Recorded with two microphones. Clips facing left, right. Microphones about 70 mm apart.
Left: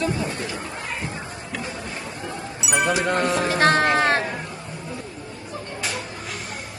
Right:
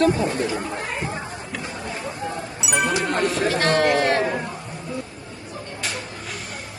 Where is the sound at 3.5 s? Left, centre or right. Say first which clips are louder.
Left 2 dB; left.